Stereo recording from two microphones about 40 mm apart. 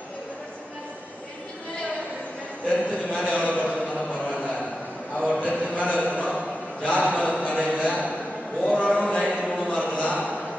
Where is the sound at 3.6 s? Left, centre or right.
Left.